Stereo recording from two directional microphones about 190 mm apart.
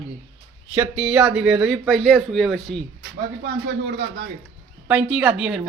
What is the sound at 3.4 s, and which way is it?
Speech, 60° right (ahead or behind).